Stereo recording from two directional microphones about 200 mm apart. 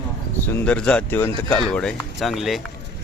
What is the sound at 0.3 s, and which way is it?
Speech, 10° left (ahead or behind).